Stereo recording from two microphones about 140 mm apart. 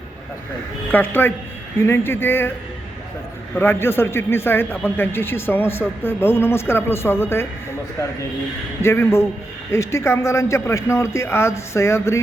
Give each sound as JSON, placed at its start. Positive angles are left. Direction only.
{"t": 0.9, "sound": "a man's voice", "side_deg": 15}
{"t": 3.5, "sound": "a man's voice", "side_deg": 15}
{"t": 8.8, "sound": "speech", "side_deg": 20}